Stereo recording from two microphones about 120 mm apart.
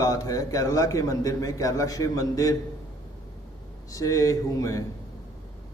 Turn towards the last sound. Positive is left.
turn(degrees=30)  # may be behind; listen again after turning